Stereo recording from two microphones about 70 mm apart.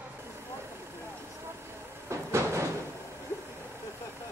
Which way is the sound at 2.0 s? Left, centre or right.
Right.